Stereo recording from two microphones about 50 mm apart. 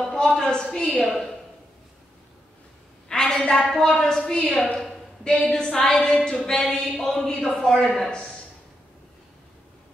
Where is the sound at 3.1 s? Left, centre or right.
Centre.